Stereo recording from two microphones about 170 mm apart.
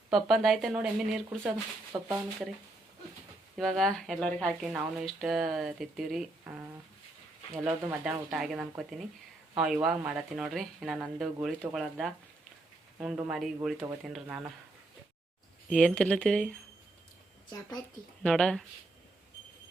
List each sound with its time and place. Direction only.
0.1 s speech: centre (ahead or behind)
1.9 s speech: 20° right (ahead or behind)
3.6 s speech: centre (ahead or behind)
7.5 s speech: 10° right (ahead or behind)
15.7 s speech: 5° left (ahead or behind)
18.2 s speech: 5° left (ahead or behind)